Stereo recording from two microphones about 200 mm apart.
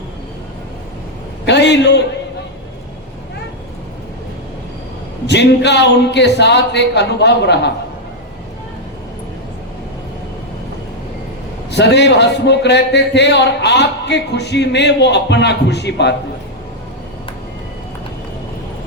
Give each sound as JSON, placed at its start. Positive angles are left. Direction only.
{"t": 1.5, "sound": "a man's voice", "side_deg": 60}
{"t": 5.2, "sound": "a man's voice", "side_deg": 60}
{"t": 11.7, "sound": "a man's voice", "side_deg": 60}